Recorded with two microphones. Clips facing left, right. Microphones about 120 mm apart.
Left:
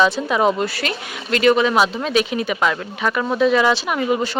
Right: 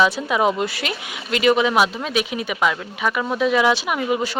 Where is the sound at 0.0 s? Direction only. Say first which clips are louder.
Left 1 dB; 5° right (ahead or behind).